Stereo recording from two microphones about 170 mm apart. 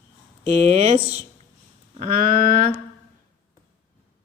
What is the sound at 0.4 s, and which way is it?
Mantra, 40° right (ahead or behind).